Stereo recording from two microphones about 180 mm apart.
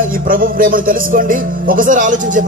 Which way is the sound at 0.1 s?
50° right (ahead or behind).